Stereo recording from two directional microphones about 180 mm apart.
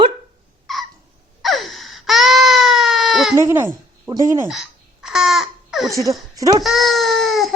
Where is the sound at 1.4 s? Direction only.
Centre (ahead or behind).